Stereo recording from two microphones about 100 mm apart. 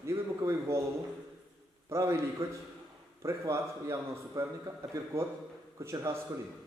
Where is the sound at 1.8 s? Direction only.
30° right (ahead or behind).